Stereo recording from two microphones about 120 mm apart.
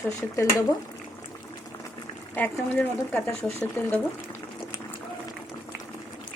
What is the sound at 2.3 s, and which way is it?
Speech, 15° left (ahead or behind).